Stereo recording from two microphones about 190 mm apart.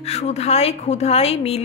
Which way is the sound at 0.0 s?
35° left (ahead or behind).